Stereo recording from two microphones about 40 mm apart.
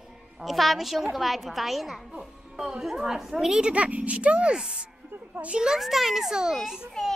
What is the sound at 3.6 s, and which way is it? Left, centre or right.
Speech, right.